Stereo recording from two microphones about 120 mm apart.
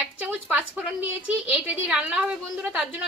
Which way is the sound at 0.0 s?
15° right (ahead or behind).